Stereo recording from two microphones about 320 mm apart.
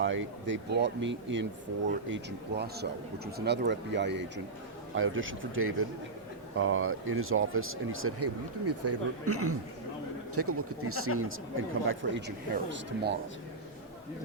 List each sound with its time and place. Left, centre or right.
0.0 s speech: right